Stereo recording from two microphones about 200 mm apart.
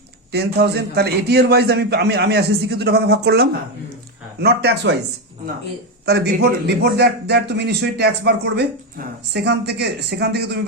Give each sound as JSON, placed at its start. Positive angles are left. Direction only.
{"t": 0.3, "sound": "a man's voice", "side_deg": -55}
{"t": 6.1, "sound": "a man's voice", "side_deg": -55}